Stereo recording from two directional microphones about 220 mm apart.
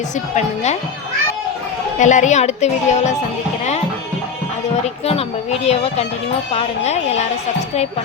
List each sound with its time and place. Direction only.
0.3 s speech: 30° left (ahead or behind)
2.0 s speech: 35° left (ahead or behind)
5.0 s speech: 30° left (ahead or behind)